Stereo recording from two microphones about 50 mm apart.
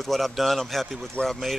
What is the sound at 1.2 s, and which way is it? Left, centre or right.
Speech, left.